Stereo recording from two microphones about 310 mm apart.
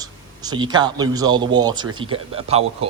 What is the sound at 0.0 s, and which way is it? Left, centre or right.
Speech, centre.